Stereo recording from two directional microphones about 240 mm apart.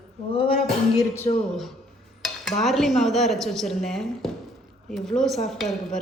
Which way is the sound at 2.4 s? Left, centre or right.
Centre.